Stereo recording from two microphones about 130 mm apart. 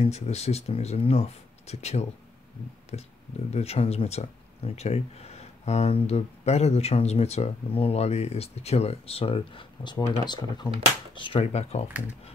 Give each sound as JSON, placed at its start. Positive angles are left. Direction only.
{"t": 0.0, "sound": "speech", "side_deg": 55}
{"t": 11.4, "sound": "speech", "side_deg": 55}